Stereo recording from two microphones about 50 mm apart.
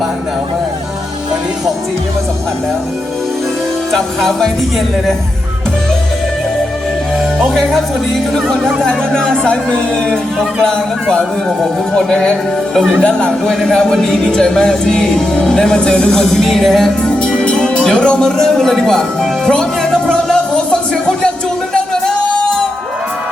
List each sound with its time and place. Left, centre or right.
3.9 s music: centre
7.3 s speech: centre
8.3 s music: centre
10.3 s music: centre
17.2 s music: centre